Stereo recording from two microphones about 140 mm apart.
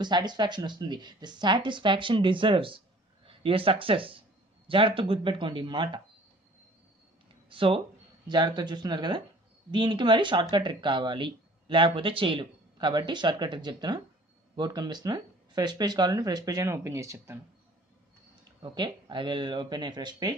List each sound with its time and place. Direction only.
0.0 s speech: 30° right (ahead or behind)
7.4 s speech: 40° right (ahead or behind); by 17.4 s 20° right (ahead or behind)
18.6 s speech: 35° right (ahead or behind)